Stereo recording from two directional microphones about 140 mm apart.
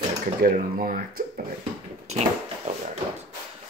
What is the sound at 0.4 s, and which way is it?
Speech, 90° right.